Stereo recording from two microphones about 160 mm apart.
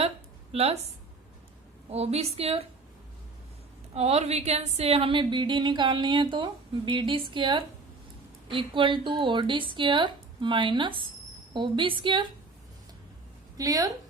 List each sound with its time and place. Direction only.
0.5 s a woman's voice: 40° right (ahead or behind)
1.9 s a woman's voice: 40° right (ahead or behind)
3.9 s a woman's voice: 40° right (ahead or behind)
13.6 s a woman's voice: 20° right (ahead or behind)